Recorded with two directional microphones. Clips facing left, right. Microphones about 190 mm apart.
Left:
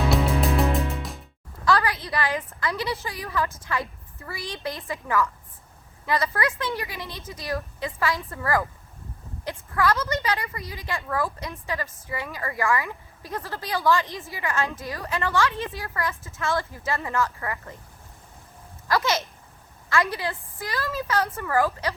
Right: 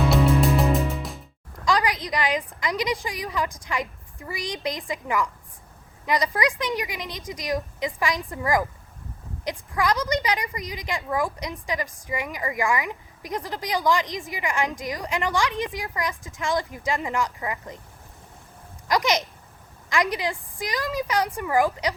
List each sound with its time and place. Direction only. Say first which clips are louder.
0.1 s music: right 3 dB; centre (ahead or behind)
1.6 s a woman's voice: even; 15° right (ahead or behind)
18.9 s a woman's voice: right 1 dB; 15° right (ahead or behind)